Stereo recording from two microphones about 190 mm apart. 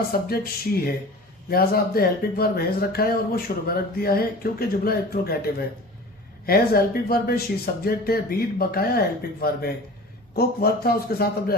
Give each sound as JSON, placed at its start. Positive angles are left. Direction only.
{"t": 0.1, "sound": "a man's voice", "side_deg": 50}